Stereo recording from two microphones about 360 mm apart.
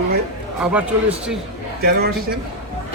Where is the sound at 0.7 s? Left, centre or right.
Centre.